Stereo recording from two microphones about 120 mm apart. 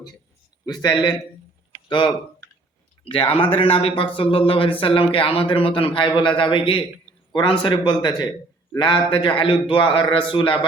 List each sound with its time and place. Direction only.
0.6 s speech: 35° left (ahead or behind)